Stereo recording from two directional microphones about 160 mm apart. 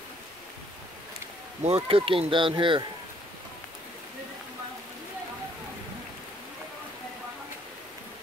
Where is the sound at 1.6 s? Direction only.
35° right (ahead or behind).